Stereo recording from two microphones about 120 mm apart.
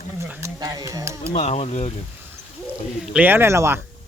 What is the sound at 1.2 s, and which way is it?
Speech, 60° left (ahead or behind).